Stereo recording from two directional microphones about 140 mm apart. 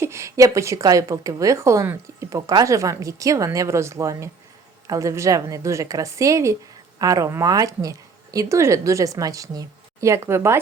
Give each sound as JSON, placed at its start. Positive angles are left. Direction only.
{"t": 0.0, "sound": "a woman's voice", "side_deg": -20}